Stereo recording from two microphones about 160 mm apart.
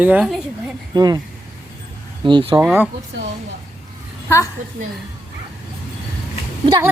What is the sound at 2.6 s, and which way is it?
Speech, 10° right (ahead or behind).